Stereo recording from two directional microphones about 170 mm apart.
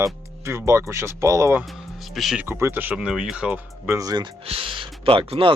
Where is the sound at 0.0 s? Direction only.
15° right (ahead or behind).